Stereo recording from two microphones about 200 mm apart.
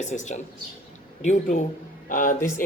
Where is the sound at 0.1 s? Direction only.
35° left (ahead or behind).